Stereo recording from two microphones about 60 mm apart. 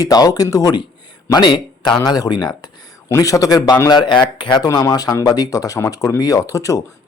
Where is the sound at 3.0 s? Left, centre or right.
Left.